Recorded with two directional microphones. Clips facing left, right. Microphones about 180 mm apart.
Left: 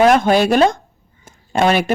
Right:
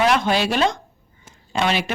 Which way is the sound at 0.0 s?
50° left (ahead or behind).